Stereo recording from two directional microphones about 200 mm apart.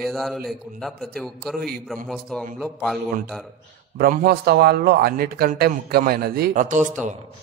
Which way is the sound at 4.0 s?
50° right (ahead or behind).